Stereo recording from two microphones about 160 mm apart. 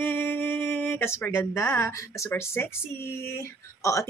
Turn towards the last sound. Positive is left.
turn(degrees=20)  # may be behind; listen again after turning